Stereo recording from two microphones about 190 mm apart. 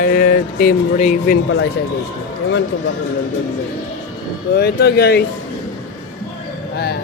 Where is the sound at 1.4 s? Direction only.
70° left (ahead or behind).